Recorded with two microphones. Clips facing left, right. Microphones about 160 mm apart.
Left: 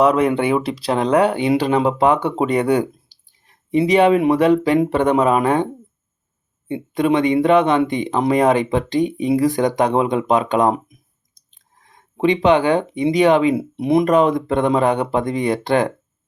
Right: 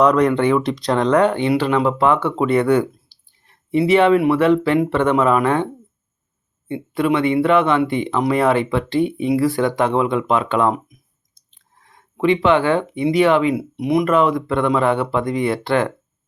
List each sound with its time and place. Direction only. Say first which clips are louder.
0.0 s speech: right 1 dB; 5° left (ahead or behind)
6.7 s speech: left 1 dB; 20° left (ahead or behind)